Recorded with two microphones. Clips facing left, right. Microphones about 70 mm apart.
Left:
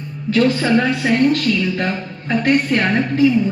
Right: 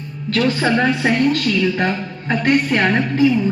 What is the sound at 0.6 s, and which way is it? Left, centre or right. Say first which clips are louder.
A woman's voice: even; right.